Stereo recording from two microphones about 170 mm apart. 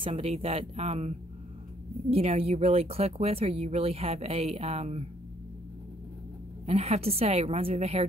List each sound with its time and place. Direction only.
0.0 s speech: 40° right (ahead or behind)
6.6 s speech: 40° right (ahead or behind)